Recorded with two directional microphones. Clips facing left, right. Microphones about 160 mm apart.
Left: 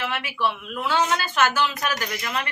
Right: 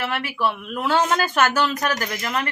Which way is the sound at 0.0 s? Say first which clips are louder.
Right 2 dB; 45° right (ahead or behind).